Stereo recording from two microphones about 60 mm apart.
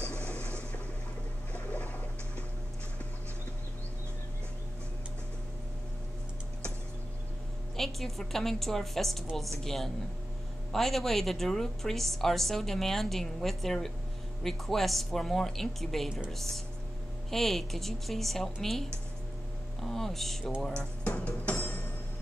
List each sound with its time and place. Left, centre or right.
0.0 s a sound: left
1.5 s boat: left
7.7 s a woman's voice: centre
21.2 s music: left